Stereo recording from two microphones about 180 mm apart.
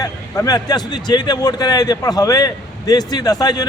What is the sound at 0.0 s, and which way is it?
A man's voice, 20° left (ahead or behind).